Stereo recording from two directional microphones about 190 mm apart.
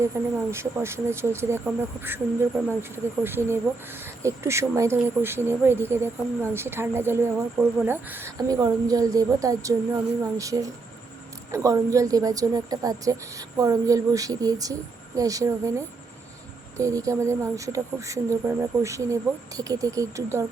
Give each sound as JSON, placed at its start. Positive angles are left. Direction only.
{"t": 0.1, "sound": "speech", "side_deg": -15}
{"t": 16.7, "sound": "speech", "side_deg": -15}